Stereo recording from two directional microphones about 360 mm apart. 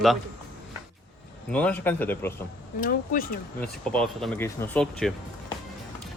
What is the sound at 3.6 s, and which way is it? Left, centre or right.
Speech, centre.